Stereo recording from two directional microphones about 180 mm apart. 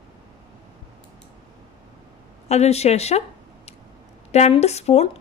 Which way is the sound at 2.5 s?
35° left (ahead or behind).